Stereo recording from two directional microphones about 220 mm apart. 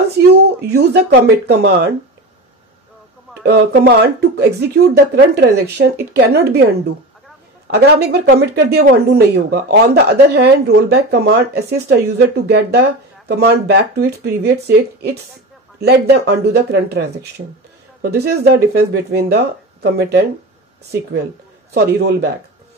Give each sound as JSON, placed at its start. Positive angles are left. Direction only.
{"t": 0.3, "sound": "speech", "side_deg": -45}
{"t": 3.4, "sound": "speech", "side_deg": -45}
{"t": 7.7, "sound": "speech", "side_deg": -50}
{"t": 21.7, "sound": "speech", "side_deg": -45}